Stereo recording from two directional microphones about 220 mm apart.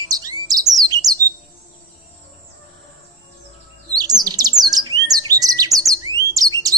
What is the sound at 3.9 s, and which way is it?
Chirp, 20° right (ahead or behind).